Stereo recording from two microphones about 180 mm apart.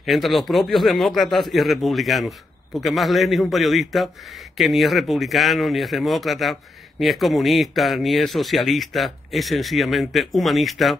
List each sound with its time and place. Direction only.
0.0 s a man's voice: centre (ahead or behind)